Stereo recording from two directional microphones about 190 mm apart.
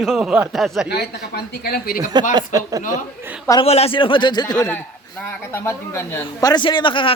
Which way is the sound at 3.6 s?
30° left (ahead or behind).